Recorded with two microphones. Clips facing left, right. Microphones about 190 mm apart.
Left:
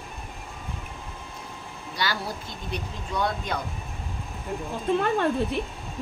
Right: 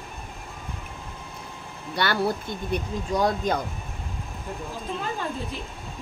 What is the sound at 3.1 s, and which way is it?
Speech, 40° right (ahead or behind).